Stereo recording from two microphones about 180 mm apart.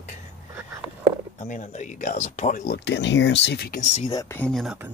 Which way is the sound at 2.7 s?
75° left (ahead or behind).